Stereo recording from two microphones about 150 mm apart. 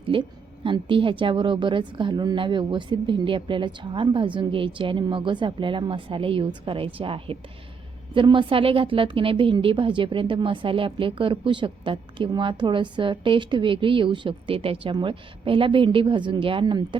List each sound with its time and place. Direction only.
0.0 s a woman's voice: 35° right (ahead or behind)